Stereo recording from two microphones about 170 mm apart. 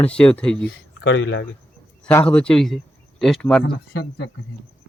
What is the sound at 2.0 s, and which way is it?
Speech, 10° left (ahead or behind).